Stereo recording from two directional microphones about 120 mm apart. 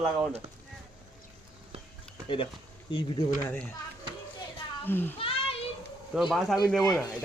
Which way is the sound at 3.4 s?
15° left (ahead or behind).